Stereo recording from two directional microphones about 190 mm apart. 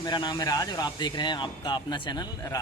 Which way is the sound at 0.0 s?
25° left (ahead or behind).